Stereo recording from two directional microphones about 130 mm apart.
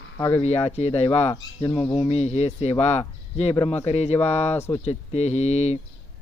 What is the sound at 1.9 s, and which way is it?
Speech, 45° left (ahead or behind).